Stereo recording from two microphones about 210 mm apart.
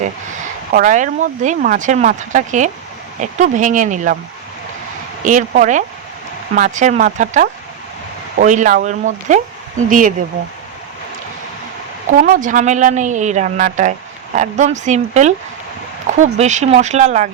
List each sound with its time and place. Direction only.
0.0 s a woman's voice: 35° right (ahead or behind)
5.2 s a woman's voice: 40° right (ahead or behind)
12.2 s a woman's voice: 40° right (ahead or behind)